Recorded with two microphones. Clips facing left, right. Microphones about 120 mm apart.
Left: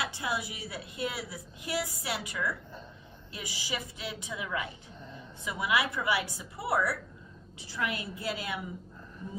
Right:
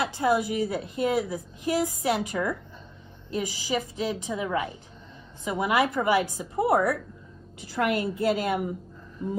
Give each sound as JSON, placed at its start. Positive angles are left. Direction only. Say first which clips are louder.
{"t": 0.0, "sound": "a woman's voice", "louder": "right 10 dB", "side_deg": -45}